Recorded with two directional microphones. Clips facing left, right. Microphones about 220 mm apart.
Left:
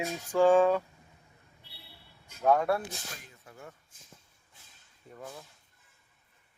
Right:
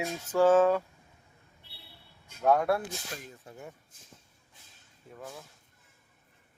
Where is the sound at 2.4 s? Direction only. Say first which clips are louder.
Even; 10° right (ahead or behind).